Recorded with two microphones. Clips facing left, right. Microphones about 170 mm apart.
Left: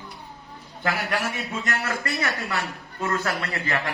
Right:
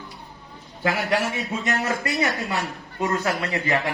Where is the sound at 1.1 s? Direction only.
20° right (ahead or behind).